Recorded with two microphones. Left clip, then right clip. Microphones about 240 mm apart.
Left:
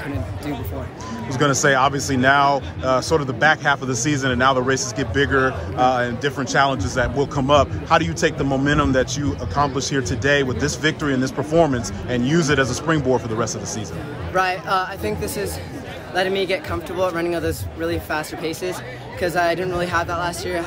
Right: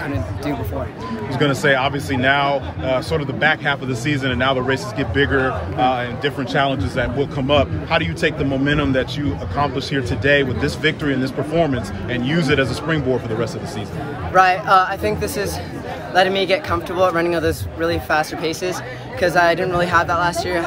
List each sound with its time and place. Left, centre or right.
1.4 s speech: centre